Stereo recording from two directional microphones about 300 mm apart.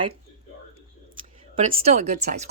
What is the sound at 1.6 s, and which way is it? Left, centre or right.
Speech, right.